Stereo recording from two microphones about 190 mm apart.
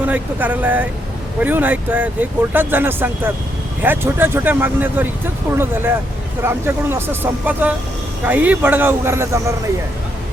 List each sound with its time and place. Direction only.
0.0 s speech: 10° right (ahead or behind)